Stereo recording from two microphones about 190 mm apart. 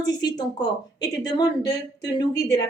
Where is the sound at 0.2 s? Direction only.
20° left (ahead or behind).